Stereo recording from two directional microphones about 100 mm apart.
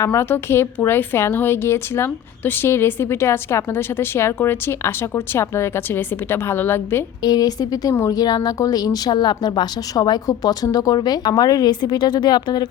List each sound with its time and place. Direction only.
0.0 s a woman's voice: 30° left (ahead or behind)
7.2 s a woman's voice: 40° left (ahead or behind)